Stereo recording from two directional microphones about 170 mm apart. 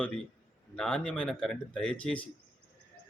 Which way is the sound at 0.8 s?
5° left (ahead or behind).